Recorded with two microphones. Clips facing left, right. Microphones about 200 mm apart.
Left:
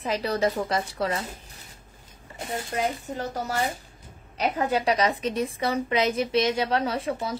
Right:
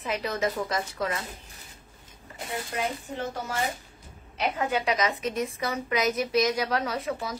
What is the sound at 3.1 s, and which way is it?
A woman's voice, 40° left (ahead or behind).